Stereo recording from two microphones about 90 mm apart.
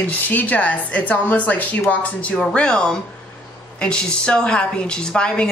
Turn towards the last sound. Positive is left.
turn(degrees=10)  # may be behind; listen again after turning